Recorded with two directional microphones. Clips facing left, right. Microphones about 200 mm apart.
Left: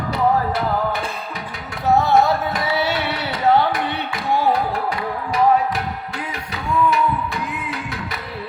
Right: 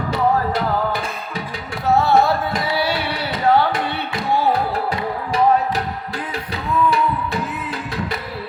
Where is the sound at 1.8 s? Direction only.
15° left (ahead or behind).